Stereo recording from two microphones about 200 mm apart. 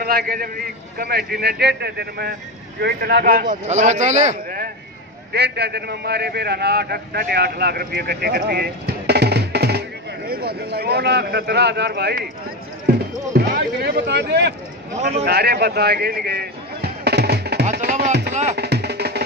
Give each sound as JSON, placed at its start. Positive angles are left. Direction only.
{"t": 0.0, "sound": "a man's voice", "side_deg": -50}
{"t": 5.3, "sound": "a man's voice", "side_deg": -55}
{"t": 13.5, "sound": "a sound", "side_deg": -55}
{"t": 17.6, "sound": "music", "side_deg": -45}
{"t": 18.3, "sound": "speech", "side_deg": -35}
{"t": 18.6, "sound": "music", "side_deg": -55}